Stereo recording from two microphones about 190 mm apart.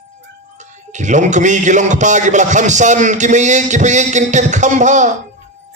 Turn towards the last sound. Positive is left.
turn(degrees=-40)  # may be behind; listen again after turning